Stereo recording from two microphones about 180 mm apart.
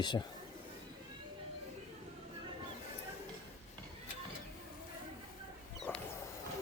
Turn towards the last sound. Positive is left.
turn(degrees=10)  # may be behind; listen again after turning